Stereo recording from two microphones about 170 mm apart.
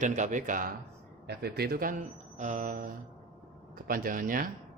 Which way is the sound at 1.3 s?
70° right (ahead or behind).